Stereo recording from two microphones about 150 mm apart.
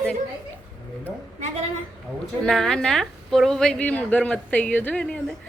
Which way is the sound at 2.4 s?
5° left (ahead or behind).